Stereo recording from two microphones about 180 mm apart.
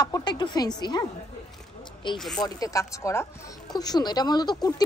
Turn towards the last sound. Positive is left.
turn(degrees=20)  # may be behind; listen again after turning